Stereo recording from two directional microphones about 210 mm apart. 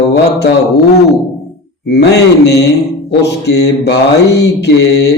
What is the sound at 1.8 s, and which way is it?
Mantra, 50° left (ahead or behind).